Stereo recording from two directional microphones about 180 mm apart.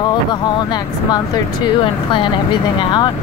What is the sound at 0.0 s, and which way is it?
Vehicle, 25° left (ahead or behind).